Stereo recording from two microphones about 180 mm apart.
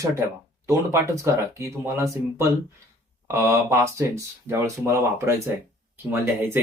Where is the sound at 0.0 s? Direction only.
15° right (ahead or behind).